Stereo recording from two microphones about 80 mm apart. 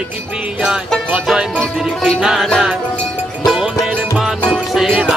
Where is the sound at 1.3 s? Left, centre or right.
Centre.